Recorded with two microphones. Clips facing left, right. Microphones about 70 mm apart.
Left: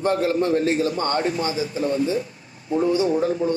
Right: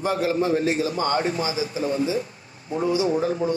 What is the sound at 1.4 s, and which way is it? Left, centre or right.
Speech, left.